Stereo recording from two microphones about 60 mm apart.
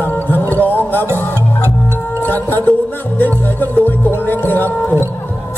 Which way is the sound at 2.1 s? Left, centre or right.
Left.